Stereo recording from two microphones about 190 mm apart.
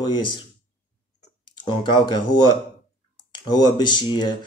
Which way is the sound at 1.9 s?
25° left (ahead or behind).